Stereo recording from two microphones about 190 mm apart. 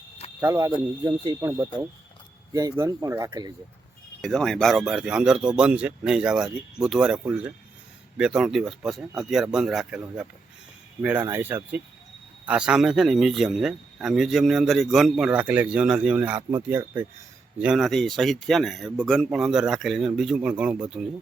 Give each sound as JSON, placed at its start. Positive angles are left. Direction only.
{"t": 0.3, "sound": "speech", "side_deg": -15}
{"t": 4.2, "sound": "speech", "side_deg": 0}